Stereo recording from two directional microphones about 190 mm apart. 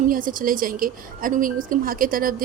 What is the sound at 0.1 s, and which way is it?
A woman's voice, 45° right (ahead or behind).